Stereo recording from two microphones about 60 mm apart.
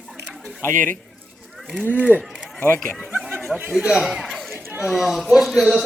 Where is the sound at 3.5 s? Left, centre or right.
Centre.